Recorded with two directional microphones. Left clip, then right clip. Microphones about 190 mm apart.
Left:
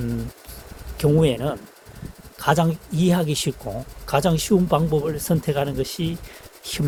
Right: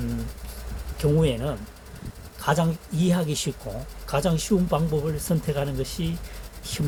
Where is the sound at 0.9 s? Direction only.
55° left (ahead or behind).